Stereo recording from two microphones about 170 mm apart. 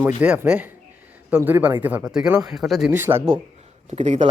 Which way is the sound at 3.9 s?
40° right (ahead or behind).